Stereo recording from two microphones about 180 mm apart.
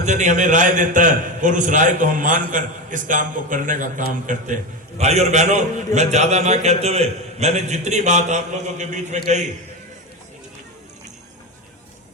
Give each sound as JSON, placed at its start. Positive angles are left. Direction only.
{"t": 0.0, "sound": "a man's voice", "side_deg": -40}